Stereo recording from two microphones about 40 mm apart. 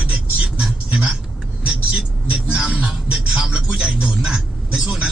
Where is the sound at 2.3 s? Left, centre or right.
Right.